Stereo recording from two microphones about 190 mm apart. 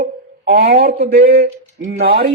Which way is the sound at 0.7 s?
55° right (ahead or behind).